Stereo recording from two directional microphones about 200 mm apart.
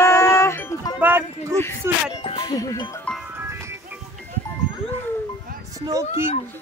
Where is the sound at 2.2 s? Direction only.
25° left (ahead or behind).